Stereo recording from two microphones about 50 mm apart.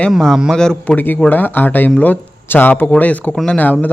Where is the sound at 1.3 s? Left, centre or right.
Left.